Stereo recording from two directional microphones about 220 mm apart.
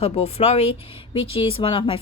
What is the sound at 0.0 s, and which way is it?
Speech, 30° left (ahead or behind).